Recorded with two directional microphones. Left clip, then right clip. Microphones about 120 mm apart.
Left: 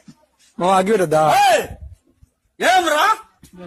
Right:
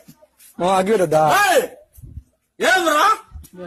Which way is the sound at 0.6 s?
50° left (ahead or behind).